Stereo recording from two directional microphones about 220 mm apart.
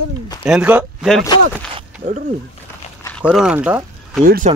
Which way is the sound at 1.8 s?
35° right (ahead or behind).